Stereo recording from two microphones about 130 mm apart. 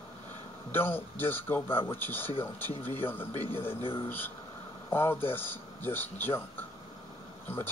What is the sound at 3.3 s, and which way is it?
Speech, 30° right (ahead or behind).